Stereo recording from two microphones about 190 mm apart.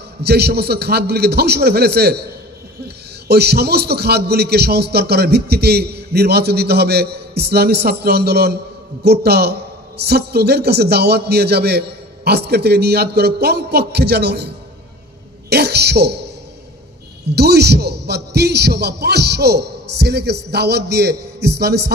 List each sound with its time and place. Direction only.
0.2 s speech: 55° right (ahead or behind)
3.3 s speech: 60° right (ahead or behind)
15.5 s speech: 60° right (ahead or behind)
17.4 s speech: 60° right (ahead or behind)